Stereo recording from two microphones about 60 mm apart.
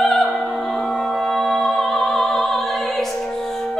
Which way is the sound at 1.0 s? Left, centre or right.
Centre.